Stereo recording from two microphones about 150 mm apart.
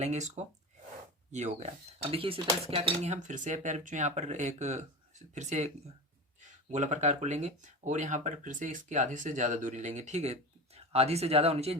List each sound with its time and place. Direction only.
0.0 s speech: 50° right (ahead or behind)